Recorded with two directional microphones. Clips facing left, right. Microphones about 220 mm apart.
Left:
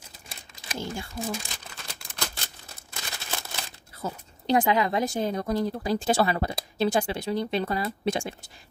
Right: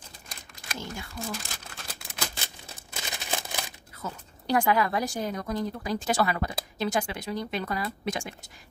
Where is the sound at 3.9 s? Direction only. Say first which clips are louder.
Left 4 dB; 30° left (ahead or behind).